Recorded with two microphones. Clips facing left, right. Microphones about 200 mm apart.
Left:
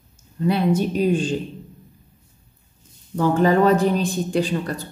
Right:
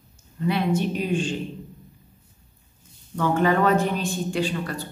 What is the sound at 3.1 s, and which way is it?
Speech, 35° left (ahead or behind).